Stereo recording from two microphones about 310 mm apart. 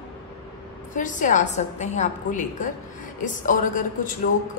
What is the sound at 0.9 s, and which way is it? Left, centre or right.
A woman's voice, left.